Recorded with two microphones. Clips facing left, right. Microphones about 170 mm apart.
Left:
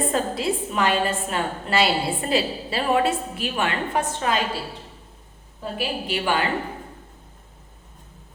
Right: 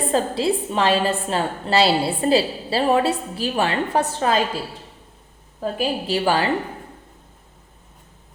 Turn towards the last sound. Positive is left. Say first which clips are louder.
# right 4 dB
turn(degrees=-35)  # may be behind; listen again after turning